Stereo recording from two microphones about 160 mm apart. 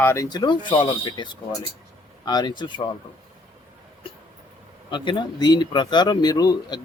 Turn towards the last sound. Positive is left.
turn(degrees=25)  # may be behind; listen again after turning